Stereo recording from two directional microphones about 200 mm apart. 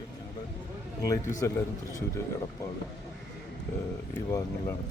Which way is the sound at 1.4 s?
15° left (ahead or behind).